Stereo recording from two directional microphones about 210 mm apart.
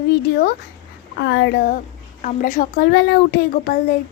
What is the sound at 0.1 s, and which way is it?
A child's voice, 45° left (ahead or behind).